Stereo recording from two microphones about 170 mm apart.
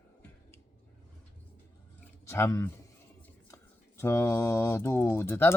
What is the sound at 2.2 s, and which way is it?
Speech, 15° left (ahead or behind).